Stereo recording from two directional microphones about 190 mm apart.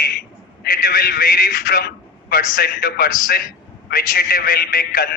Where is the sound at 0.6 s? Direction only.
50° left (ahead or behind).